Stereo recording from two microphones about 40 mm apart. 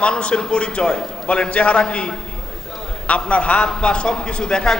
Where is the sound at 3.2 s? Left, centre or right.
Left.